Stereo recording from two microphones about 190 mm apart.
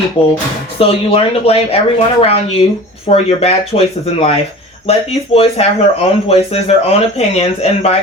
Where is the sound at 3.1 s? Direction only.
35° left (ahead or behind).